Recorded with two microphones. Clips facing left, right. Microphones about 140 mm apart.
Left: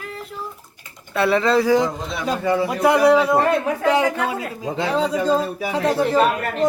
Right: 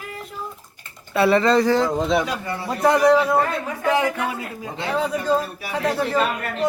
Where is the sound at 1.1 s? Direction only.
Centre (ahead or behind); by 5.9 s 20° left (ahead or behind).